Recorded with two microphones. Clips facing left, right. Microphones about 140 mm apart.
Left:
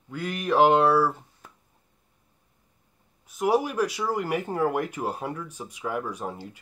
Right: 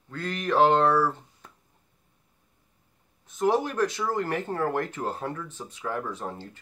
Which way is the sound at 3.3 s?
10° left (ahead or behind).